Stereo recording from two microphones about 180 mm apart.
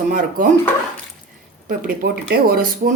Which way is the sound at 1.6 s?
55° right (ahead or behind).